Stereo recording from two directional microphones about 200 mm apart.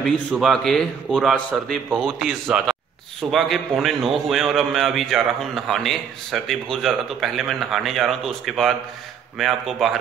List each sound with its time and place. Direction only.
0.0 s a man's voice: centre (ahead or behind)